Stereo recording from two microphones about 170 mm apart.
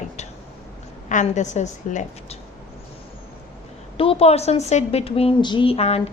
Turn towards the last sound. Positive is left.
turn(degrees=35)  # may be behind; listen again after turning